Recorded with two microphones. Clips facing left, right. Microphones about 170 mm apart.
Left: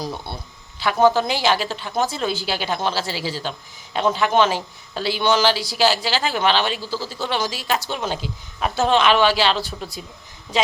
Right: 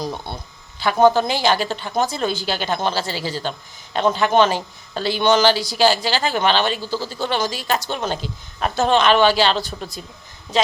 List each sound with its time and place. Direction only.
0.0 s speech: 20° right (ahead or behind)
0.8 s speech: 5° left (ahead or behind)